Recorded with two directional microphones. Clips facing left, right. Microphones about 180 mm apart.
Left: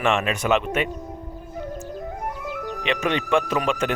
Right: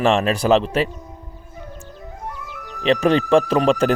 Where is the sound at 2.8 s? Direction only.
35° right (ahead or behind).